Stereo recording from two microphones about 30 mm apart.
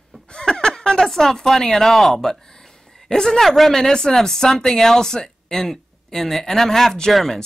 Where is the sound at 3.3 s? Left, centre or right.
Centre.